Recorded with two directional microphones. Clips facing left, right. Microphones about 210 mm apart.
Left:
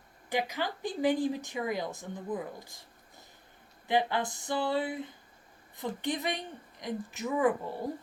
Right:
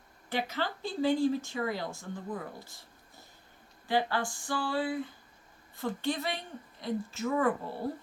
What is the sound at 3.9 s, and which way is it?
Speech, 20° left (ahead or behind).